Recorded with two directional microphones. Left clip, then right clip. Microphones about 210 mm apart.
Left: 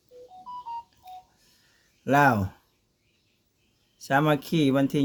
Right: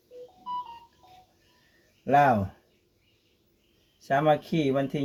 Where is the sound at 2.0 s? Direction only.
45° left (ahead or behind).